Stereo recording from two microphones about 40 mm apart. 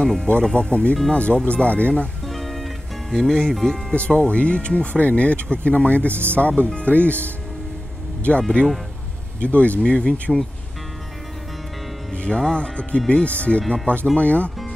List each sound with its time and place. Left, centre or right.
0.0 s speech: left
2.2 s music: centre
4.1 s speech: left
6.0 s speech: right
6.3 s speech: left
8.2 s speech: left
12.1 s speech: centre; by 14.5 s left